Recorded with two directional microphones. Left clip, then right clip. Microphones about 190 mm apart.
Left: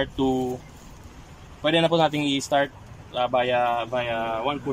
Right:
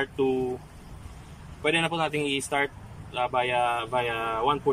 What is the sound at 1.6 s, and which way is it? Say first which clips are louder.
A man's voice: left 5 dB; 30° left (ahead or behind).